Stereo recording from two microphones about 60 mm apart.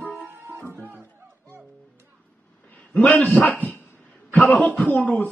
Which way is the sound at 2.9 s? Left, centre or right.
Left.